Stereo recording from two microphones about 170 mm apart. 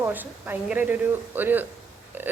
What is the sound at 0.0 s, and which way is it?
A woman's voice, 10° right (ahead or behind).